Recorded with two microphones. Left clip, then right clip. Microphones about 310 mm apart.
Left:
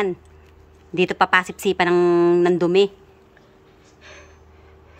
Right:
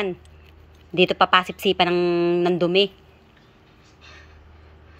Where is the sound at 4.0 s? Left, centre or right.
Centre.